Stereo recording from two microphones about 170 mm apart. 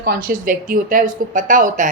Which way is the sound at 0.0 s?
55° right (ahead or behind).